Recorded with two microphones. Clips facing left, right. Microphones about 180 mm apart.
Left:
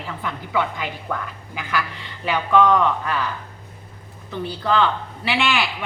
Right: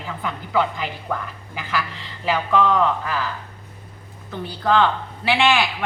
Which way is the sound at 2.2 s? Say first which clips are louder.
Left 2 dB; 5° right (ahead or behind).